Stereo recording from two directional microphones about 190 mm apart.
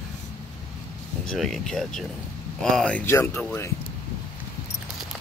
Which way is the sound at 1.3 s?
Centre (ahead or behind).